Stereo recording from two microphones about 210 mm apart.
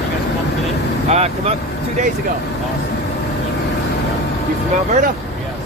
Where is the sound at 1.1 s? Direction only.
30° right (ahead or behind).